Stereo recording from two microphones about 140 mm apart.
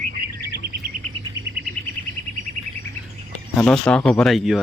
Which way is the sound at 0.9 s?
70° right (ahead or behind).